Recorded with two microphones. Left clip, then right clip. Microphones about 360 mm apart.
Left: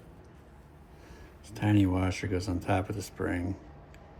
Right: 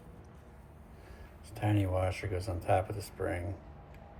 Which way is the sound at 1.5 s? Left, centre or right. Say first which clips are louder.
Left 5 dB; left.